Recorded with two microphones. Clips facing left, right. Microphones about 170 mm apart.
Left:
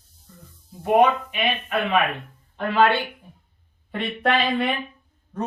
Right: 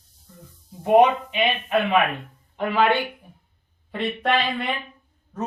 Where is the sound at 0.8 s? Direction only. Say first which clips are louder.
Right 2 dB; 20° right (ahead or behind).